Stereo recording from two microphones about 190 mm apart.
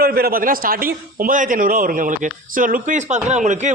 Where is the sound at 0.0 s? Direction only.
55° right (ahead or behind).